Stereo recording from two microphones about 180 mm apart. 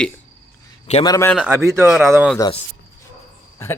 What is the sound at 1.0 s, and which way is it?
Speech, 20° left (ahead or behind).